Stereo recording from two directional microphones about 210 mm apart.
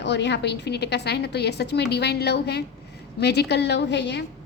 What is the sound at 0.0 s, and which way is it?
A woman's voice, 55° left (ahead or behind).